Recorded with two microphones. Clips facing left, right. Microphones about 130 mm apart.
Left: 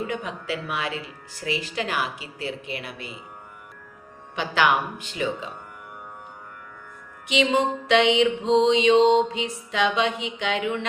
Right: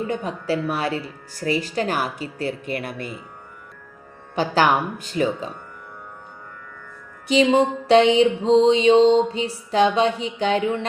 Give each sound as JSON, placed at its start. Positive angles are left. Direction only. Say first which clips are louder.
{"t": 0.1, "sound": "speech", "louder": "right 5 dB", "side_deg": -35}
{"t": 4.4, "sound": "speech", "louder": "right 3 dB", "side_deg": -40}
{"t": 7.3, "sound": "speech", "louder": "right 5 dB", "side_deg": -35}